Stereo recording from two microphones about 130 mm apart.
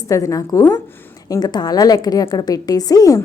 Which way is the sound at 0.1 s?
25° left (ahead or behind).